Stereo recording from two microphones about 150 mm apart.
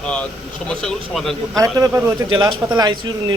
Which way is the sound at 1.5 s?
20° right (ahead or behind).